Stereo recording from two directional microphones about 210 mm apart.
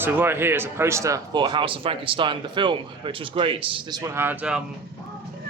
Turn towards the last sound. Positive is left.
turn(degrees=-5)  # may be behind; listen again after turning